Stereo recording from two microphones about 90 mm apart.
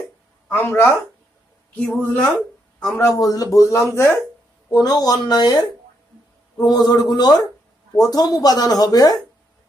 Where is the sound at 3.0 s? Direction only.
40° left (ahead or behind).